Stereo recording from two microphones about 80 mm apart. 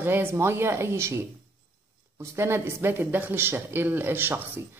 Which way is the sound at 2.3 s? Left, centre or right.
Right.